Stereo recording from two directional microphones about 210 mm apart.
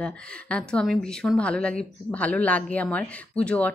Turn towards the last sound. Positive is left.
turn(degrees=5)  # may be behind; listen again after turning